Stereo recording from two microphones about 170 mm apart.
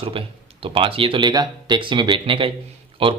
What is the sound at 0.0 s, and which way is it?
Speech, 30° right (ahead or behind).